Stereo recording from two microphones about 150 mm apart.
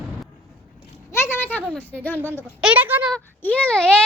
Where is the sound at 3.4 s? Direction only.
10° left (ahead or behind).